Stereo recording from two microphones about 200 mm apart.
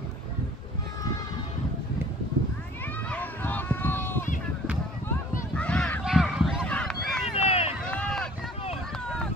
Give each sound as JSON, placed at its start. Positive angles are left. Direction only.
{"t": 3.1, "sound": "run", "side_deg": 10}
{"t": 5.6, "sound": "a sound", "side_deg": 5}
{"t": 7.3, "sound": "run", "side_deg": 30}
{"t": 7.8, "sound": "run", "side_deg": 5}